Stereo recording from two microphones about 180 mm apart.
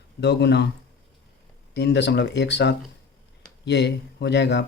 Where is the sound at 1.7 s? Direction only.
70° left (ahead or behind).